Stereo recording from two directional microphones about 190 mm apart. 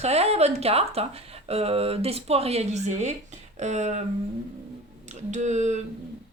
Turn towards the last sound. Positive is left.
turn(degrees=-35)  # may be behind; listen again after turning